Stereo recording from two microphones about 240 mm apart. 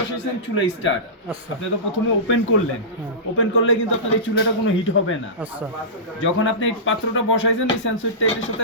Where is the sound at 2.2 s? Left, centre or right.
Left.